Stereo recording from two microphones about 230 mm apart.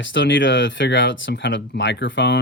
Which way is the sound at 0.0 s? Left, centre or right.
Left.